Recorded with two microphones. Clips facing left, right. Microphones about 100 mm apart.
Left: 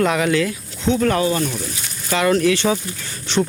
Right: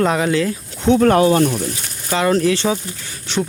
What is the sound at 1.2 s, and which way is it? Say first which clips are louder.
Speech: right 6 dB; 60° right (ahead or behind).